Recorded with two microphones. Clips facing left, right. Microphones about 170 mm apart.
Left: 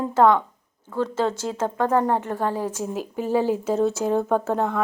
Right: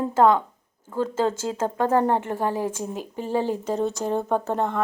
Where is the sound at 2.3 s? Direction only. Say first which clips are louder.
Even; 15° right (ahead or behind).